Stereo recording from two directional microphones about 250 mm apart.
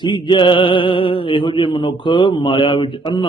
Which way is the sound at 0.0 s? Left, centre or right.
Centre.